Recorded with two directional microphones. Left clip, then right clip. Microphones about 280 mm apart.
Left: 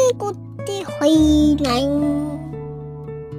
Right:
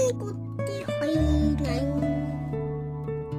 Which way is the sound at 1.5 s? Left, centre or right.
Left.